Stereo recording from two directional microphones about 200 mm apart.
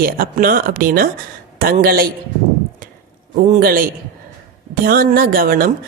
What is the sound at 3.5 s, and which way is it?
Speech, 45° right (ahead or behind).